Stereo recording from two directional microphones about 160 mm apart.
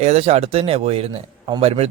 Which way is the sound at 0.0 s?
40° right (ahead or behind).